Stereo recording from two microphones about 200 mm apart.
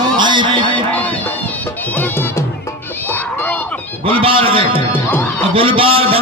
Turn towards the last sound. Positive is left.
turn(degrees=-30)  # may be behind; listen again after turning